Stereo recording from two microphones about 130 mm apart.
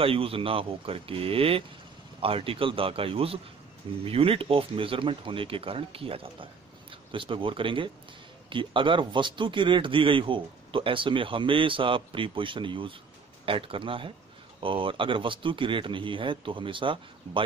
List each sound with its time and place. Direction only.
0.0 s speech: 45° right (ahead or behind)